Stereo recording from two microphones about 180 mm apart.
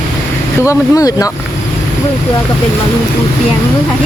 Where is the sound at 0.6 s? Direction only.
20° left (ahead or behind).